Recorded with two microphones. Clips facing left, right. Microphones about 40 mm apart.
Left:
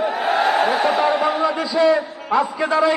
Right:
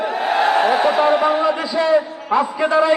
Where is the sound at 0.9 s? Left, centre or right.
Right.